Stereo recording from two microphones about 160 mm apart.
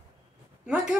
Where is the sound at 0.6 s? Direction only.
5° right (ahead or behind).